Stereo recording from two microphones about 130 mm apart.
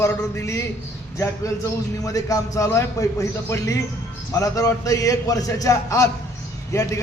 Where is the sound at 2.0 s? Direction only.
25° left (ahead or behind).